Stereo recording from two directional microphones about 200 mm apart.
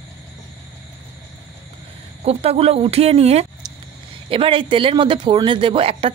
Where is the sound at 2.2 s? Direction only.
30° right (ahead or behind).